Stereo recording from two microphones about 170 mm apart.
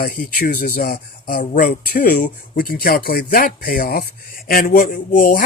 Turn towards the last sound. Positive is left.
turn(degrees=55)  # may be behind; listen again after turning